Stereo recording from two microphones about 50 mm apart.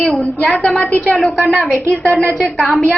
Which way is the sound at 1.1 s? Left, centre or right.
Centre.